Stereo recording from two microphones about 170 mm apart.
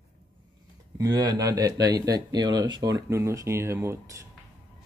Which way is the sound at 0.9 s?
20° right (ahead or behind).